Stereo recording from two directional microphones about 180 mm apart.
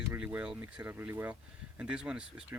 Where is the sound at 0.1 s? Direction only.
10° right (ahead or behind).